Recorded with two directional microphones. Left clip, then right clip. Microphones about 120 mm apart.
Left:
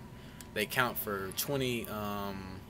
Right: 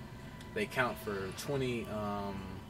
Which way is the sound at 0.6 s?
35° left (ahead or behind).